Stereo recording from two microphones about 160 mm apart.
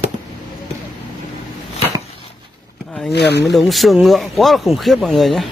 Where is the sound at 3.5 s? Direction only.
Centre (ahead or behind).